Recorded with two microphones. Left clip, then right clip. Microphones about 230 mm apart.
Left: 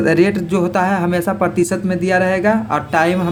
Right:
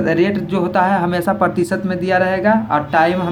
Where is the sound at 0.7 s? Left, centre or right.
Left.